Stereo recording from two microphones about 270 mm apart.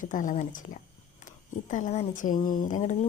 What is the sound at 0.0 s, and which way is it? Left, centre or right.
Speech, left.